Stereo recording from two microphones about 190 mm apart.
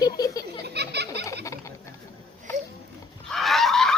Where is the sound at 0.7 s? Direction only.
60° right (ahead or behind).